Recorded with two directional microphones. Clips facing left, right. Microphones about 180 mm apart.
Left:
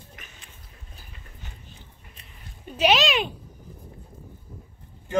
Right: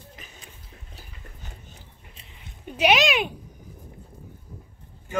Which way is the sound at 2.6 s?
10° right (ahead or behind).